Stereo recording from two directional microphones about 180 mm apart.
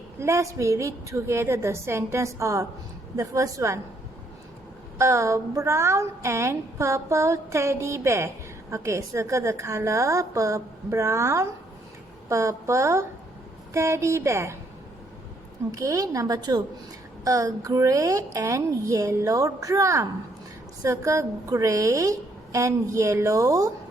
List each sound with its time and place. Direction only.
0.2 s a woman's voice: 15° right (ahead or behind)
4.9 s a woman's voice: 15° right (ahead or behind)
15.7 s a woman's voice: 15° right (ahead or behind)